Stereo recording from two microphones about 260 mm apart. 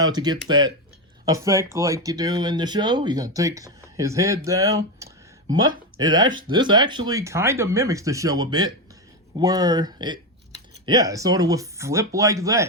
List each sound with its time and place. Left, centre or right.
0.0 s speech: centre